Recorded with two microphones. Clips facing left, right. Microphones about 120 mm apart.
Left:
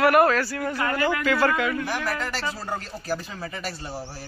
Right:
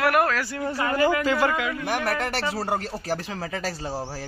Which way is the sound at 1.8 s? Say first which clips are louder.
Right 2 dB; 60° right (ahead or behind).